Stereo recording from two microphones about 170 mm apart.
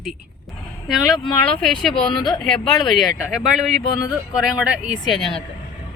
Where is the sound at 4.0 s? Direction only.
20° left (ahead or behind).